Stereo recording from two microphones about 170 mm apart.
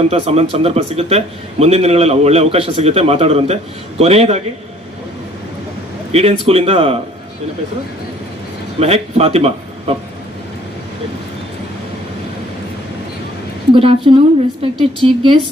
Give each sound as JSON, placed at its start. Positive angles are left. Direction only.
{"t": 0.1, "sound": "a man's voice", "side_deg": -40}
{"t": 6.1, "sound": "a man's voice", "side_deg": -35}
{"t": 8.8, "sound": "speech", "side_deg": -35}
{"t": 13.7, "sound": "a man's voice", "side_deg": -30}